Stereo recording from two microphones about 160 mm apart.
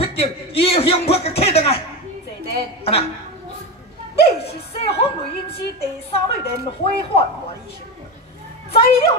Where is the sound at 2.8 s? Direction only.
35° left (ahead or behind).